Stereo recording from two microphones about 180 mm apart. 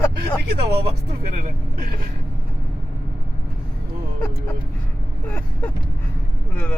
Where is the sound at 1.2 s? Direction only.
55° right (ahead or behind).